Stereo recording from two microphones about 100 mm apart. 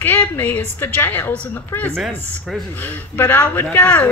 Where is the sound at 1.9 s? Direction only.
5° right (ahead or behind).